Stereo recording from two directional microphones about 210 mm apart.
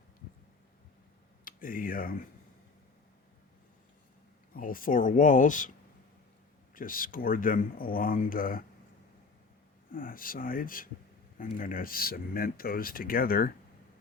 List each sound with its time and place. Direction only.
1.5 s speech: 40° left (ahead or behind)
4.5 s speech: 40° left (ahead or behind)
6.7 s speech: 40° left (ahead or behind)
9.9 s speech: 40° left (ahead or behind)